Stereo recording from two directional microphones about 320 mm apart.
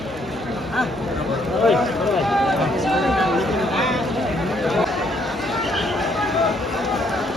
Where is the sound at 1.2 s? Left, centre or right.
Centre.